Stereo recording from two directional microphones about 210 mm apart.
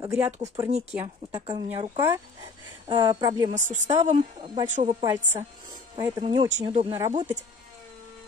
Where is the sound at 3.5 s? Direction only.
35° right (ahead or behind).